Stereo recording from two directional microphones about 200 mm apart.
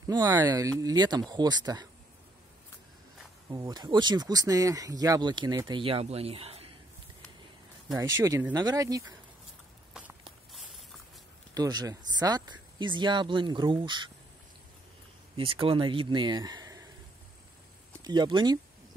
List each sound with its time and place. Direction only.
0.1 s speech: 20° right (ahead or behind)
3.4 s speech: 20° right (ahead or behind)
8.2 s speech: 15° right (ahead or behind)
9.9 s a sound: 5° right (ahead or behind)
10.5 s walk: centre (ahead or behind)
11.5 s speech: 20° right (ahead or behind)
15.3 s speech: 25° right (ahead or behind)
18.0 s speech: 20° right (ahead or behind)